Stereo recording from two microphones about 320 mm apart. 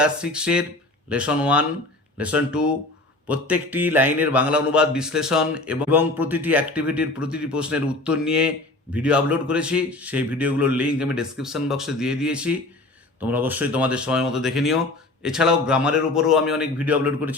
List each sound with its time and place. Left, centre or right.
0.0 s speech: centre